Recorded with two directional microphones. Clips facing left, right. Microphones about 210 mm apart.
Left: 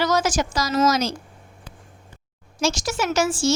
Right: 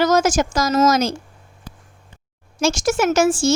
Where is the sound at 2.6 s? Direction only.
50° right (ahead or behind).